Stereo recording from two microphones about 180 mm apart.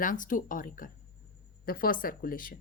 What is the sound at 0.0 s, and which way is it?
A woman's voice, 50° left (ahead or behind).